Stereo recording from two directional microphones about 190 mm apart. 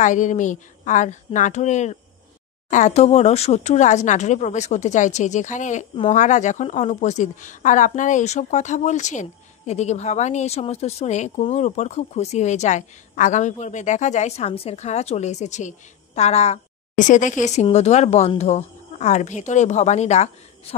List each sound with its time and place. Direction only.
0.0 s a woman's voice: 40° left (ahead or behind)